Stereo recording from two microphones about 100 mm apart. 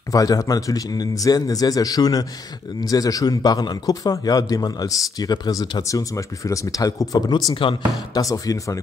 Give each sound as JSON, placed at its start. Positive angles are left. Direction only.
{"t": 0.1, "sound": "a man's voice", "side_deg": 35}